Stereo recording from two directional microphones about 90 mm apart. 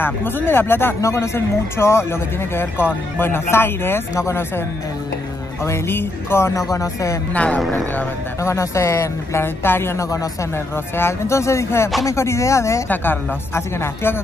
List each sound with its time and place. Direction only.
0.0 s speech: 25° left (ahead or behind)
5.7 s speech: 25° left (ahead or behind)
7.3 s speech: 10° left (ahead or behind)
8.4 s speech: 35° left (ahead or behind)
12.8 s speech: 20° left (ahead or behind)